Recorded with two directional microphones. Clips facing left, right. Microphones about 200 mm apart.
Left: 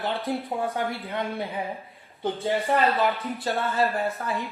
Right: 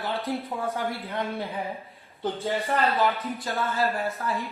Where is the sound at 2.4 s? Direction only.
15° left (ahead or behind).